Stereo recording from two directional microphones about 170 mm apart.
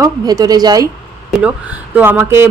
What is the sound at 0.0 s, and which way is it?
Speech, 20° right (ahead or behind).